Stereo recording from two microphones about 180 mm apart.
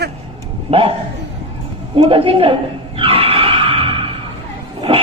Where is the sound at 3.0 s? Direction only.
30° right (ahead or behind).